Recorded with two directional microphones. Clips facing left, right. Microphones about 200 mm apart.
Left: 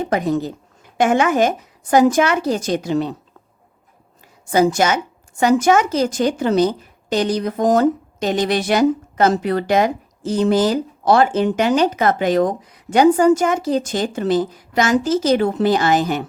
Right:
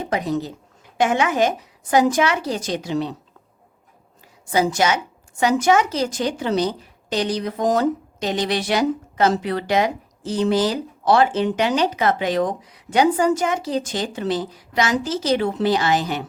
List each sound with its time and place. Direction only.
0.1 s a woman's voice: 50° left (ahead or behind)
4.5 s a woman's voice: 50° left (ahead or behind)